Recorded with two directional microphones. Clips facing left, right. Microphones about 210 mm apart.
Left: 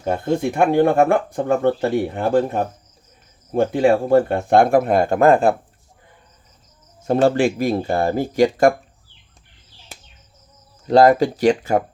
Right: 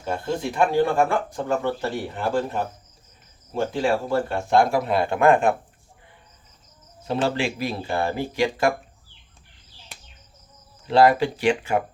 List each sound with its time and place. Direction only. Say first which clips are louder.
0.0 s speech: left 6 dB; 50° left (ahead or behind); by 5.5 s 35° left (ahead or behind)
7.1 s speech: left 8 dB; 45° left (ahead or behind)
10.8 s speech: left 4 dB; 40° left (ahead or behind)